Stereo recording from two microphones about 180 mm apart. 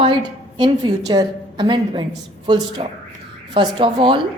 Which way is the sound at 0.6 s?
20° right (ahead or behind).